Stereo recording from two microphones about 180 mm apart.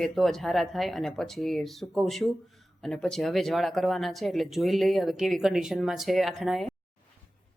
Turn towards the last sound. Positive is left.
turn(degrees=0)  # may be behind; listen again after turning